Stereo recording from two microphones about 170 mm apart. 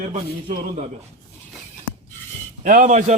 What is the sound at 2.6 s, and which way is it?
Speech, 50° right (ahead or behind).